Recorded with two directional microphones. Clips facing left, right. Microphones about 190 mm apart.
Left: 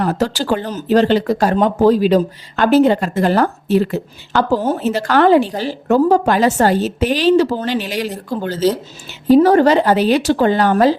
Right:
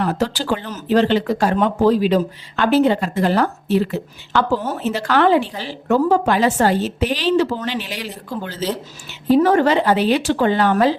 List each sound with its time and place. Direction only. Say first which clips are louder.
0.0 s a woman's voice: left 3 dB; 40° left (ahead or behind)